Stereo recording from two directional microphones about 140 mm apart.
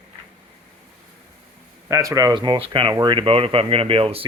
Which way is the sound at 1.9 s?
25° right (ahead or behind).